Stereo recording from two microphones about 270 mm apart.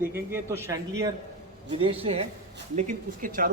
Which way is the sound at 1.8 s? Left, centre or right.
Right.